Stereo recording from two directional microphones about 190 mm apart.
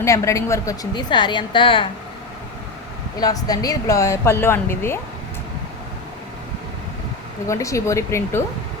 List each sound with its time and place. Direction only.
0.0 s a woman's voice: 15° left (ahead or behind)
3.2 s a woman's voice: 20° left (ahead or behind)
7.4 s a woman's voice: 15° left (ahead or behind)